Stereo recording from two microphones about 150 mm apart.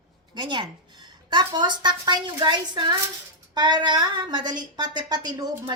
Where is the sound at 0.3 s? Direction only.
30° right (ahead or behind).